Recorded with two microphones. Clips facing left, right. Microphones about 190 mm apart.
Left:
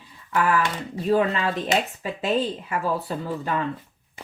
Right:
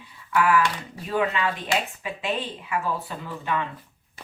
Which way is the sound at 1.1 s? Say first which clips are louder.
Left 3 dB; 40° left (ahead or behind).